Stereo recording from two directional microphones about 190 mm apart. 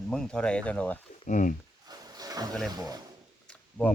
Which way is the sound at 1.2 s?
40° left (ahead or behind).